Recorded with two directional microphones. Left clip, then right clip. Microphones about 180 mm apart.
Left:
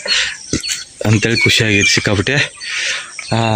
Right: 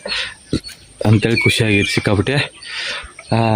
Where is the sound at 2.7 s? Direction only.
15° right (ahead or behind).